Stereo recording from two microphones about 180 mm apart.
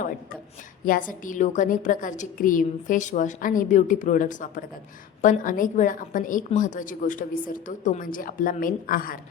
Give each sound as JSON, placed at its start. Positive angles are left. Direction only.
{"t": 1.2, "sound": "a woman's voice", "side_deg": 45}